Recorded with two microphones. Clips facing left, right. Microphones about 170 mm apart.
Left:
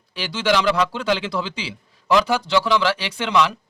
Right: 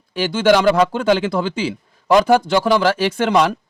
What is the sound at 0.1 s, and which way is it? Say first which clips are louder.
A man's voice: right 7 dB; 50° right (ahead or behind).